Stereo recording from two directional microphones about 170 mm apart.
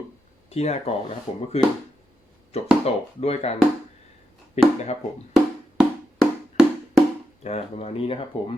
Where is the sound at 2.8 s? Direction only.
35° left (ahead or behind).